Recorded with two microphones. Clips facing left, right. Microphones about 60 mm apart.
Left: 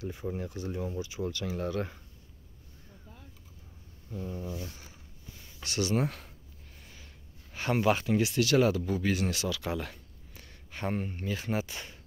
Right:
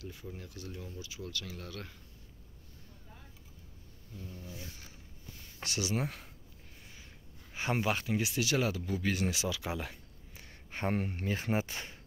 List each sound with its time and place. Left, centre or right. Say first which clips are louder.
0.0 s speech: left 10 dB; left
4.1 s speech: left 10 dB; left
5.6 s a sound: left 5 dB; centre
7.5 s speech: left 5 dB; centre
7.9 s speech: left 6 dB; centre
9.3 s speech: left 3 dB; centre
10.4 s a sound: even; right
11.0 s speech: even; right
11.2 s speech: left 1 dB; right